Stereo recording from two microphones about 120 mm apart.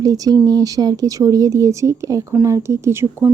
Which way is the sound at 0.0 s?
30° right (ahead or behind).